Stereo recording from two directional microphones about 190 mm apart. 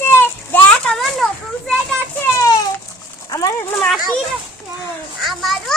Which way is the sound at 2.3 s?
15° left (ahead or behind).